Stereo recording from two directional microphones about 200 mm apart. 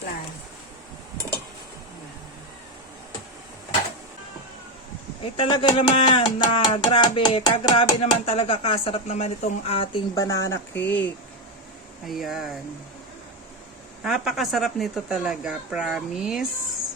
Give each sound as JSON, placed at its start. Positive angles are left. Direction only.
{"t": 5.2, "sound": "speech", "side_deg": 25}
{"t": 10.2, "sound": "speech", "side_deg": 15}
{"t": 12.0, "sound": "speech", "side_deg": 0}
{"t": 14.0, "sound": "speech", "side_deg": 0}